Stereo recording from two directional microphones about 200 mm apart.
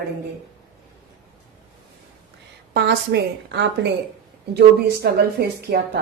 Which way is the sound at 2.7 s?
60° right (ahead or behind).